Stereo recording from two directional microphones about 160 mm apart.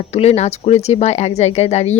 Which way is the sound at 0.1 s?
40° left (ahead or behind).